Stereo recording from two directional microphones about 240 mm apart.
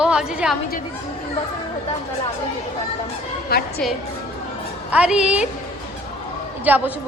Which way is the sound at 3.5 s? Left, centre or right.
Left.